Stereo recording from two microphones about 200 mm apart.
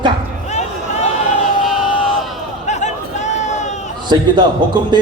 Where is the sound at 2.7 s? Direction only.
35° left (ahead or behind).